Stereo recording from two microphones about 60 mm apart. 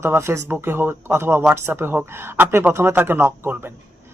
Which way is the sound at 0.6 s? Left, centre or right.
Right.